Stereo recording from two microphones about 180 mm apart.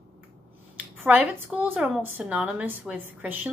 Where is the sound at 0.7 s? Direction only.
10° right (ahead or behind).